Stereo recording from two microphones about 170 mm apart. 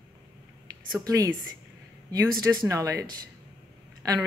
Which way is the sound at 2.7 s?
20° right (ahead or behind).